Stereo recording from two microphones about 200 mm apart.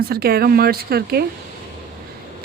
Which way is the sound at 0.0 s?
50° right (ahead or behind).